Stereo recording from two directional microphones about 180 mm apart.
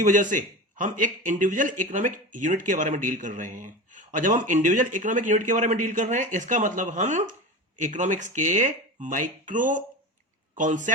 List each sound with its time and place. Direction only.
0.0 s speech: 45° right (ahead or behind)